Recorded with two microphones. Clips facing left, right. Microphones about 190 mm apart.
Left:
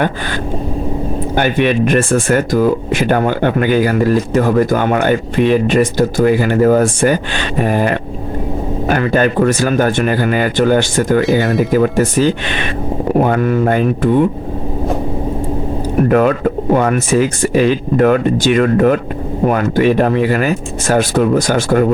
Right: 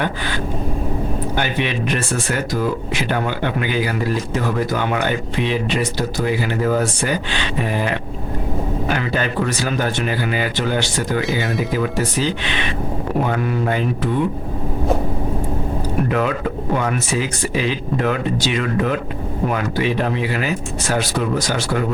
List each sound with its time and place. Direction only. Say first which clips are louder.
1.4 s speech: left 10 dB; 55° left (ahead or behind)
11.2 s speech: left 8 dB; centre (ahead or behind)
11.7 s speech: left 8 dB; 50° left (ahead or behind)
16.0 s speech: left 10 dB; 50° left (ahead or behind)